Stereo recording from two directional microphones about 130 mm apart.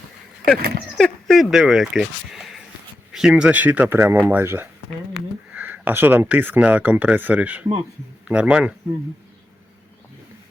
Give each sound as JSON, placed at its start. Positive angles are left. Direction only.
{"t": 0.4, "sound": "speech", "side_deg": 5}